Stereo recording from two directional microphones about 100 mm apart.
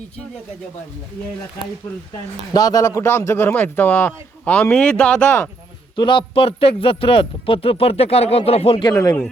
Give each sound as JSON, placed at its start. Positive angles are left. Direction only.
{"t": 2.5, "sound": "speech", "side_deg": 40}
{"t": 6.0, "sound": "speech", "side_deg": 55}
{"t": 8.7, "sound": "speech", "side_deg": 50}